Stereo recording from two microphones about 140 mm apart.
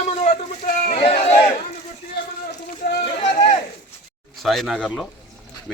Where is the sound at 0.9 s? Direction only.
45° left (ahead or behind).